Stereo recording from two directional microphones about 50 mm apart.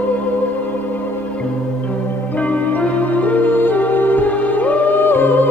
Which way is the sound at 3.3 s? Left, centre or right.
Left.